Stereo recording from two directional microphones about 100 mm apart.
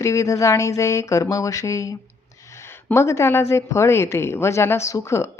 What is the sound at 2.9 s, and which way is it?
Speech, 30° left (ahead or behind).